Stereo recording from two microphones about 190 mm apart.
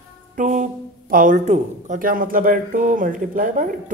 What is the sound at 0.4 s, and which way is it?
Speech, 40° right (ahead or behind).